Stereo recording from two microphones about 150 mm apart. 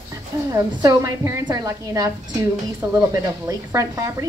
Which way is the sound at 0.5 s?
20° right (ahead or behind).